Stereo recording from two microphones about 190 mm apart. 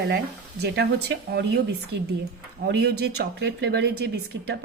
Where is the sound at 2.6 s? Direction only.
60° right (ahead or behind).